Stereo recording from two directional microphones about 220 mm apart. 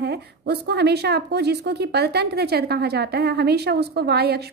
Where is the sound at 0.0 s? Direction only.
45° right (ahead or behind).